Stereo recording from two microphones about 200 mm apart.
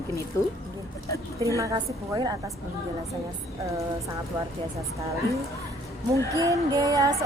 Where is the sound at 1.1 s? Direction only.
15° left (ahead or behind).